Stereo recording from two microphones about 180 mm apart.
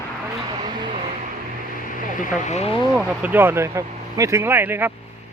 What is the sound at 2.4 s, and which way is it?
Speech, 40° left (ahead or behind).